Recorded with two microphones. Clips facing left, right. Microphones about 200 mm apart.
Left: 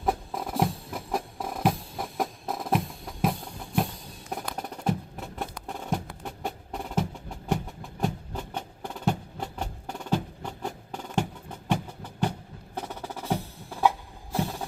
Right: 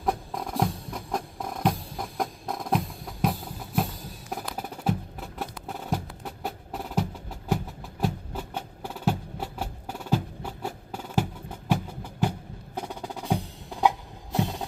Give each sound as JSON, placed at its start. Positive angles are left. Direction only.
{"t": 0.0, "sound": "music", "side_deg": 0}
{"t": 12.7, "sound": "percussion", "side_deg": -10}
{"t": 14.3, "sound": "a sound", "side_deg": -20}